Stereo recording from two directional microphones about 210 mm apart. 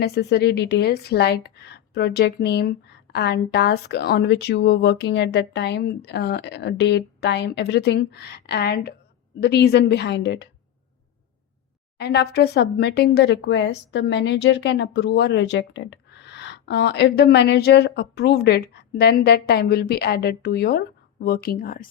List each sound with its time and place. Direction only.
0.0 s speech: 50° left (ahead or behind)
11.9 s speech: 50° left (ahead or behind)